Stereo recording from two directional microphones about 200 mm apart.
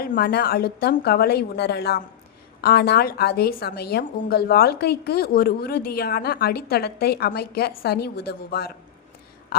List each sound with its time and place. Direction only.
0.0 s a woman's voice: 50° left (ahead or behind)